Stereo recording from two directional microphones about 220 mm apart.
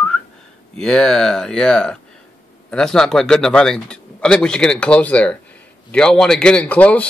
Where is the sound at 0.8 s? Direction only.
5° left (ahead or behind).